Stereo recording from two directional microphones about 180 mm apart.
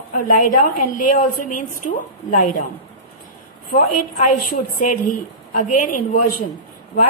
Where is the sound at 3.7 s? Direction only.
45° left (ahead or behind).